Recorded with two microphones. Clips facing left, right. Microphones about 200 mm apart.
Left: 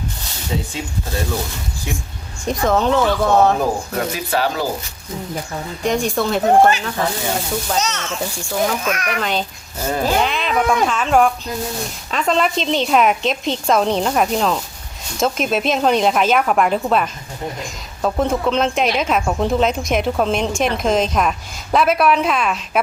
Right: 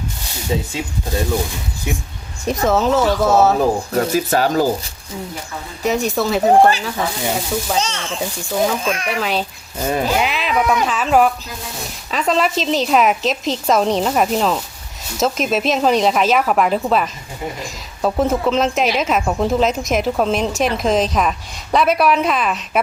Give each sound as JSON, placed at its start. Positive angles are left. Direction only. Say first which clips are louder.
{"t": 2.5, "sound": "a woman's voice", "louder": "right 1 dB", "side_deg": -5}
{"t": 3.9, "sound": "speech", "louder": "right 4 dB", "side_deg": -45}
{"t": 5.8, "sound": "a woman's voice", "louder": "right 1 dB", "side_deg": -5}
{"t": 7.8, "sound": "speech", "louder": "even", "side_deg": -30}
{"t": 9.2, "sound": "a woman's voice", "louder": "right 1 dB", "side_deg": -5}